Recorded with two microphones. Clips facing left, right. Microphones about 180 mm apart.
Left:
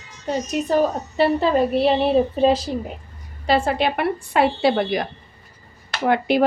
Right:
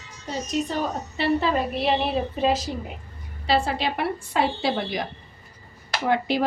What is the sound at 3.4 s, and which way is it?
A woman's voice, 50° left (ahead or behind).